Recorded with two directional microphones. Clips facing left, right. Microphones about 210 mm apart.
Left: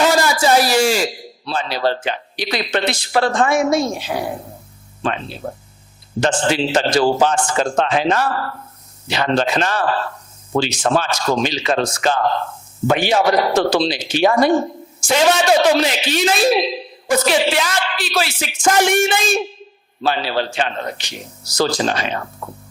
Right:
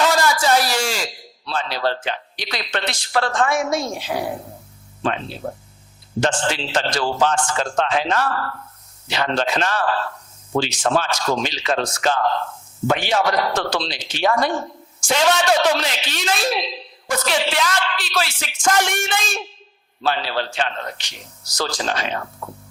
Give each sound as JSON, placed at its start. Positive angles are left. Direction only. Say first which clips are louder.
{"t": 0.0, "sound": "a man's voice", "louder": "left 3 dB", "side_deg": 5}
{"t": 6.3, "sound": "speech", "louder": "left 6 dB", "side_deg": 10}
{"t": 10.9, "sound": "speech", "louder": "left 2 dB", "side_deg": 20}
{"t": 11.4, "sound": "speech", "louder": "left 4 dB", "side_deg": 10}
{"t": 22.1, "sound": "speech", "louder": "left 2 dB", "side_deg": 25}